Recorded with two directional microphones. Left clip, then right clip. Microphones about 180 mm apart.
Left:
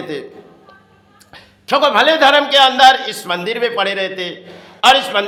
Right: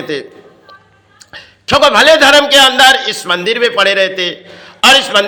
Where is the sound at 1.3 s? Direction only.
15° right (ahead or behind).